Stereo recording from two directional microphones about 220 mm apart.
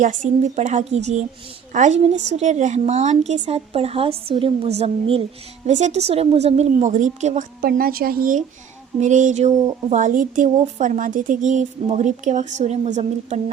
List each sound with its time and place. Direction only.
0.0 s a woman's voice: 35° right (ahead or behind)